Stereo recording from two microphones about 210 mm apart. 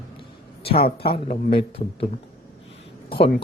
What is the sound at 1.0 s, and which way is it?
A man's voice, 25° left (ahead or behind).